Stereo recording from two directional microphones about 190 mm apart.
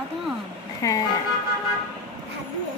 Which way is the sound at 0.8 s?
20° left (ahead or behind).